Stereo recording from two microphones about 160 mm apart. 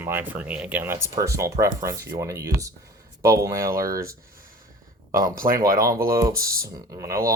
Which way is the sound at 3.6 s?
65° right (ahead or behind).